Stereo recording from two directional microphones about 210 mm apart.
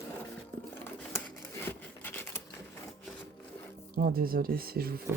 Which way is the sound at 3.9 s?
45° right (ahead or behind).